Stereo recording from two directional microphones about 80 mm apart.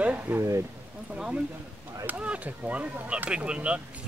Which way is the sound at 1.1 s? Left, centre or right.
Centre.